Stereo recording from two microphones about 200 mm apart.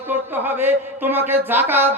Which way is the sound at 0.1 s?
10° right (ahead or behind).